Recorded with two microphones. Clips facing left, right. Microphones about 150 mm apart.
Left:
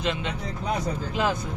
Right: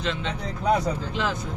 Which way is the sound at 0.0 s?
15° left (ahead or behind).